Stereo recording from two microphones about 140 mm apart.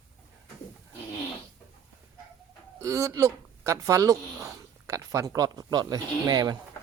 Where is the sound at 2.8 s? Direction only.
20° right (ahead or behind).